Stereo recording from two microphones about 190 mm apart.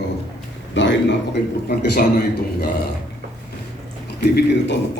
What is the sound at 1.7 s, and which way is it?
Speech, 55° left (ahead or behind).